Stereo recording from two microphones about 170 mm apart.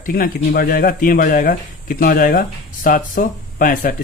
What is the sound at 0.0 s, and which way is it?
Speech, 60° left (ahead or behind).